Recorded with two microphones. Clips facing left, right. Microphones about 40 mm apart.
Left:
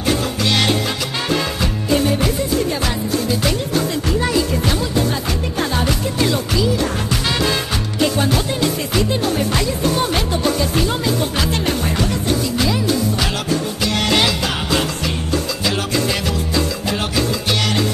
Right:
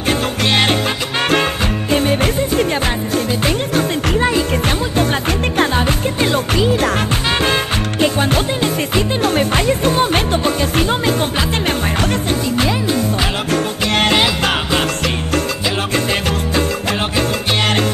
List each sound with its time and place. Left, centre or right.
0.0 s music: right
1.9 s music: right
4.5 s music: right
5.8 s music: right
8.0 s music: right
9.2 s music: right
12.3 s music: right
15.9 s music: right